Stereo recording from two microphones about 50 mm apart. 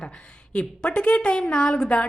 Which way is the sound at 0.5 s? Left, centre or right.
Left.